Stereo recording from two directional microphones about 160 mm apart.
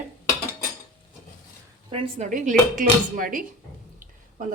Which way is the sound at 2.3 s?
50° right (ahead or behind).